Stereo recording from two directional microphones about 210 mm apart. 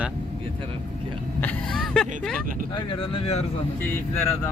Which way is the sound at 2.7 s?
25° left (ahead or behind).